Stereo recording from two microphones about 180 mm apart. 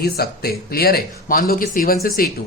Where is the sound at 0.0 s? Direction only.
60° left (ahead or behind).